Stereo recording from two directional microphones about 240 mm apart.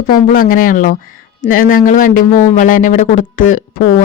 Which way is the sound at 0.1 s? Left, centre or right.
Left.